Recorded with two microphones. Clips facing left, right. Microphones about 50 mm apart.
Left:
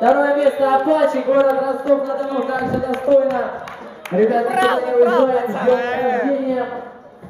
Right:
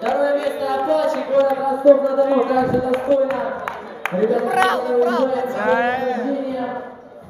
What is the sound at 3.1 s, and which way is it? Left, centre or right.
Speech, left.